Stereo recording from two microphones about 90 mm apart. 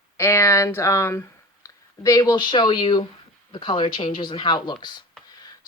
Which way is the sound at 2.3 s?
60° left (ahead or behind).